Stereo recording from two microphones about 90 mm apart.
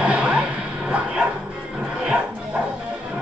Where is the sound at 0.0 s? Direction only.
10° right (ahead or behind).